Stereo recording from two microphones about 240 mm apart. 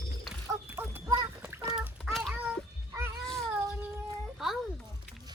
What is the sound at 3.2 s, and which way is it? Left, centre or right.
Child singing, centre.